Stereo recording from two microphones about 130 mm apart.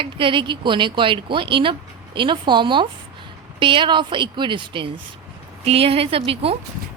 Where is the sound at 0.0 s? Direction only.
40° right (ahead or behind).